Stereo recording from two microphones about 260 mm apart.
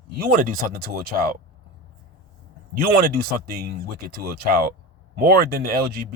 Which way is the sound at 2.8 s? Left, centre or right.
Right.